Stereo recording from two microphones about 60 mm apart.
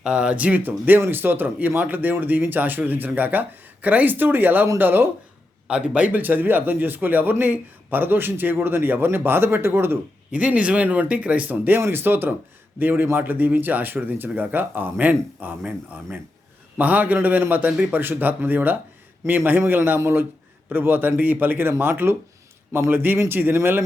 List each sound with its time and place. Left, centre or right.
0.0 s speech: centre; by 5.0 s right
5.6 s speech: centre; by 10.0 s right
10.3 s speech: right
16.7 s speech: right